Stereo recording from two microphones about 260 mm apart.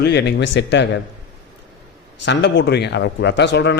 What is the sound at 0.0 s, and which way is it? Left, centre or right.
Speech, left.